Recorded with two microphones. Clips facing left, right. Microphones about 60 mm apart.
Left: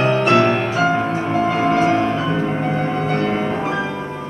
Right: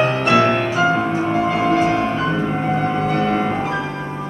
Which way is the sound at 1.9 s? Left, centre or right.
Centre.